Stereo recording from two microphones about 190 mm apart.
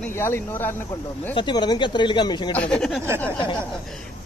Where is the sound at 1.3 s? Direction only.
25° left (ahead or behind).